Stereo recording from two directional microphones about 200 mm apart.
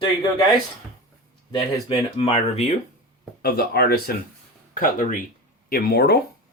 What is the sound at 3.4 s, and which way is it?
Speech, 50° left (ahead or behind).